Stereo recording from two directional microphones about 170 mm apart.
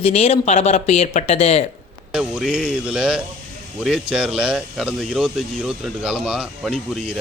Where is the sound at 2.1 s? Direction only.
Centre (ahead or behind).